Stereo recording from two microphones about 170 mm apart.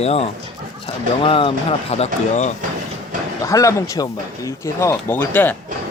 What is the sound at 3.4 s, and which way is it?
Speech, 20° left (ahead or behind).